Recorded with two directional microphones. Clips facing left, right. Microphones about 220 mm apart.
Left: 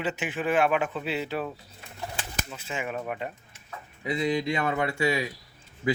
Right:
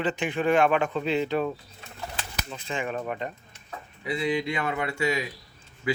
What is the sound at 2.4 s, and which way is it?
Speech, 5° left (ahead or behind).